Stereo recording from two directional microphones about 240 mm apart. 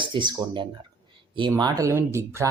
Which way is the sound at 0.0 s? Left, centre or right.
Centre.